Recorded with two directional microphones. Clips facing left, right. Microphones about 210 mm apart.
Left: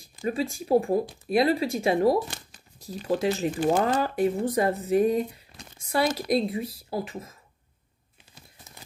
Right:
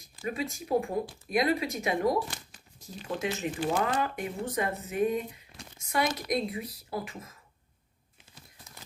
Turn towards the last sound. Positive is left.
turn(degrees=25)  # may be behind; listen again after turning